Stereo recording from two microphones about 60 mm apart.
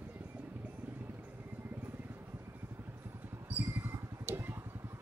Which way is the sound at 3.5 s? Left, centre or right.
Right.